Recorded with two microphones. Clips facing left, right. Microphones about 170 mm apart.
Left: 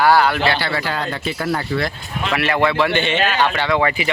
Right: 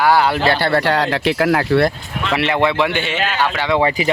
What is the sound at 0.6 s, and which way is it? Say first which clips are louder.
Speech: right 7 dB; 60° right (ahead or behind).